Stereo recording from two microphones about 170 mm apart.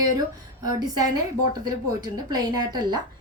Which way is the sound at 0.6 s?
20° right (ahead or behind).